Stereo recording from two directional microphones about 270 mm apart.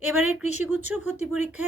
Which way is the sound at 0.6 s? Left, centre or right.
Centre.